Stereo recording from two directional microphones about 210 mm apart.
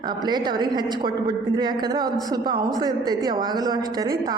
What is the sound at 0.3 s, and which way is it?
A woman's voice, 20° right (ahead or behind).